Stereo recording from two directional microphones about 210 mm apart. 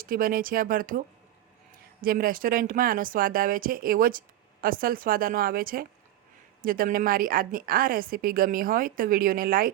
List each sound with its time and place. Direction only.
0.0 s a woman's voice: 40° right (ahead or behind)